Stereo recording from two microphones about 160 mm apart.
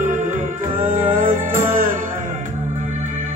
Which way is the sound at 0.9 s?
55° right (ahead or behind).